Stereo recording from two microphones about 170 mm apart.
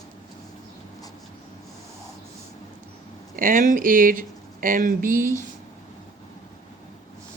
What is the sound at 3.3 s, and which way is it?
Speech, 55° right (ahead or behind).